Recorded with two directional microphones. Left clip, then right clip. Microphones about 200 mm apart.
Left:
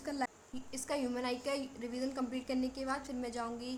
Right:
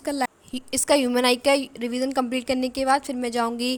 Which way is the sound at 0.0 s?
40° right (ahead or behind).